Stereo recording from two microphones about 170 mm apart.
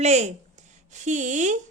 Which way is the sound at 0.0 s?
40° right (ahead or behind).